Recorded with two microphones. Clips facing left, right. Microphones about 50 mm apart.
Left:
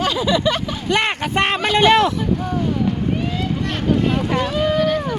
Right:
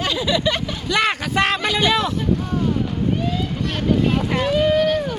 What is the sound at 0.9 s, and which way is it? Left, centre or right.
Vehicle, left.